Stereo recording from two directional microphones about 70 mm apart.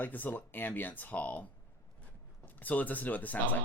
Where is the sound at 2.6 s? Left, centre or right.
Left.